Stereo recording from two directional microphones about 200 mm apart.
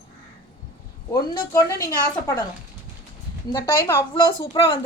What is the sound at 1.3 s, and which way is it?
Speech, 15° left (ahead or behind).